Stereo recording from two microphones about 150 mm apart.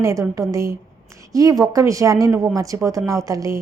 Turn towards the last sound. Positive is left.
turn(degrees=-20)  # may be behind; listen again after turning